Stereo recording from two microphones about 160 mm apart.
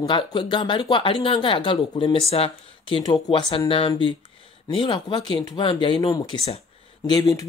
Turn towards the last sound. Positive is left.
turn(degrees=25)  # may be behind; listen again after turning